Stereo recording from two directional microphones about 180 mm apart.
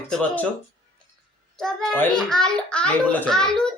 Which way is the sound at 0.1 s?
5° left (ahead or behind).